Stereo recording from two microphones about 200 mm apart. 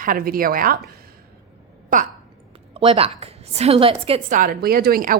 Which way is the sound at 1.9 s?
40° right (ahead or behind).